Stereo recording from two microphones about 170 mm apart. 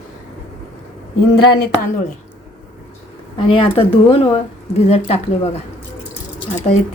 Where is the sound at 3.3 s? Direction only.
30° left (ahead or behind).